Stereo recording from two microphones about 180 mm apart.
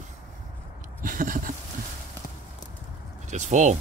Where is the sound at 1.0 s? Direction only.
50° right (ahead or behind).